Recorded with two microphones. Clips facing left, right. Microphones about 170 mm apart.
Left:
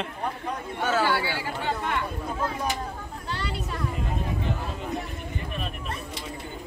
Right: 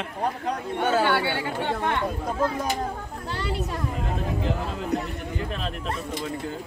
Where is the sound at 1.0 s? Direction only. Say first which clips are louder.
Right 3 dB; 60° right (ahead or behind).